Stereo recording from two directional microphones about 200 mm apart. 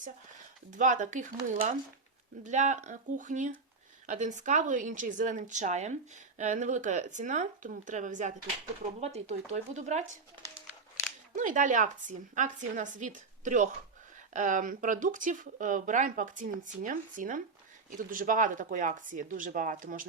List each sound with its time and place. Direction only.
0.7 s speech: 40° right (ahead or behind)
11.3 s speech: 40° right (ahead or behind)